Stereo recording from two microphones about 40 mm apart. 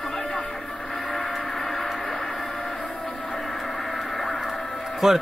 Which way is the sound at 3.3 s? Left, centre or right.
Centre.